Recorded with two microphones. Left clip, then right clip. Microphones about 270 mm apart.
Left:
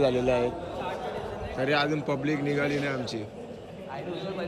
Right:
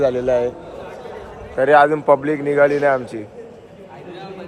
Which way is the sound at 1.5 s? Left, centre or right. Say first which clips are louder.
Right 14 dB; right.